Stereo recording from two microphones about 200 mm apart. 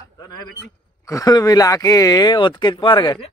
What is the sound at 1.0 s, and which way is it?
Speech, 15° left (ahead or behind).